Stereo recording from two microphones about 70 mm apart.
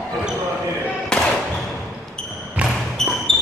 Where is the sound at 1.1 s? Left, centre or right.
Centre.